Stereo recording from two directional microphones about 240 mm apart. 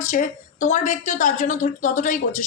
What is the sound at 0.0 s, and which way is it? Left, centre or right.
A woman's voice, left.